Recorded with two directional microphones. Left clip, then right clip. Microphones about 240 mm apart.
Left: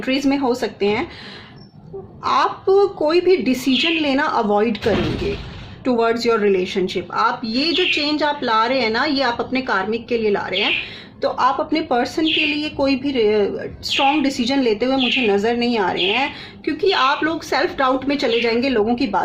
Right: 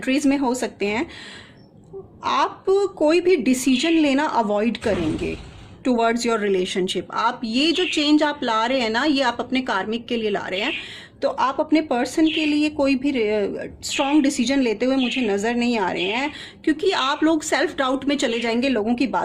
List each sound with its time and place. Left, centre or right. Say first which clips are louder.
0.0 s a woman's voice: left 2 dB; right
2.2 s a woman's voice: left 3 dB; right